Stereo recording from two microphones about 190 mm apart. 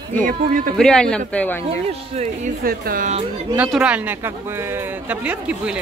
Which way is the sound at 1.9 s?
35° right (ahead or behind).